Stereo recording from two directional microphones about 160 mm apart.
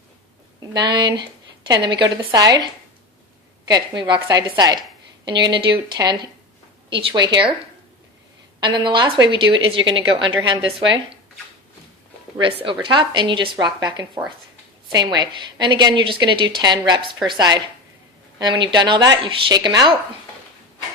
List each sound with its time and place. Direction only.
0.7 s a woman's voice: 25° right (ahead or behind)
3.7 s a woman's voice: 25° right (ahead or behind)
8.6 s a woman's voice: 30° right (ahead or behind)
12.4 s a woman's voice: 30° right (ahead or behind)